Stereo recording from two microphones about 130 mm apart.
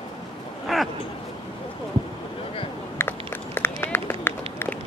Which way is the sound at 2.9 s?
20° left (ahead or behind).